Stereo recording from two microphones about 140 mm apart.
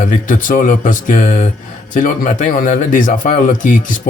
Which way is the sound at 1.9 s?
75° left (ahead or behind).